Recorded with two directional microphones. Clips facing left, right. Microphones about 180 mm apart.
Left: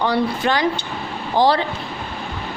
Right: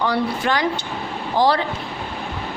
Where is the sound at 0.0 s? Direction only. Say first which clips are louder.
Left 2 dB; 25° left (ahead or behind).